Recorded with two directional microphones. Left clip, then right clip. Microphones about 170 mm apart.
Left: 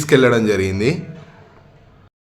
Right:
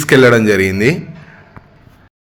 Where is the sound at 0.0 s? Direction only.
30° right (ahead or behind).